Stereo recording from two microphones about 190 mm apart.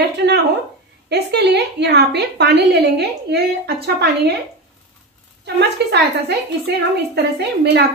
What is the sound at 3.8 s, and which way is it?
Speech, 60° right (ahead or behind).